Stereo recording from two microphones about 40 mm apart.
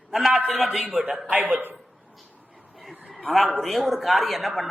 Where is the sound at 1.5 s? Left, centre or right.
Right.